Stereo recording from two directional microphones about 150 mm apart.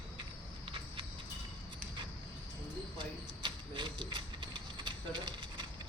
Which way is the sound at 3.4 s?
30° right (ahead or behind).